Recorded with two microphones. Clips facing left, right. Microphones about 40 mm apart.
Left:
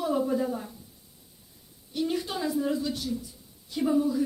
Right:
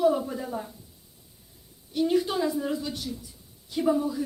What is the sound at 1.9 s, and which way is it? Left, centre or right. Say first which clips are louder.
Speech: right 5 dB; centre.